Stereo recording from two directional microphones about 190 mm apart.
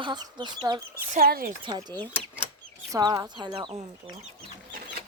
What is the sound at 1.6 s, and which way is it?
Speech, 20° right (ahead or behind).